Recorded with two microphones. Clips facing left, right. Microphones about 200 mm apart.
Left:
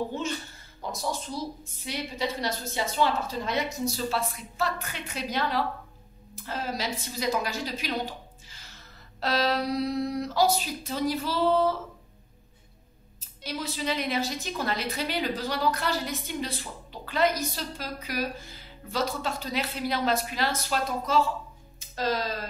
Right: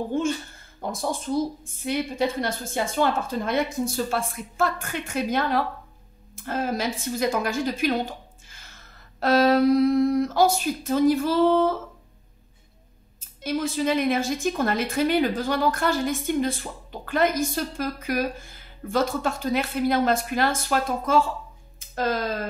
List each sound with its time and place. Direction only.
0.1 s a woman's voice: 50° right (ahead or behind)
13.4 s a woman's voice: 50° right (ahead or behind)